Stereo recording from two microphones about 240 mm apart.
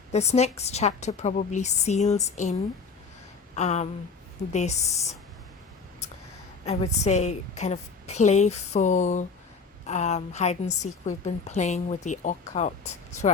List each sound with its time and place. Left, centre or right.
0.1 s a woman's voice: left
3.5 s a sound: left
4.5 s a woman's voice: left
6.7 s a woman's voice: left